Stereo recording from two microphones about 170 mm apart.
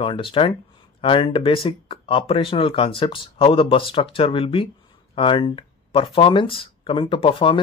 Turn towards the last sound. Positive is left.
turn(degrees=30)  # may be behind; listen again after turning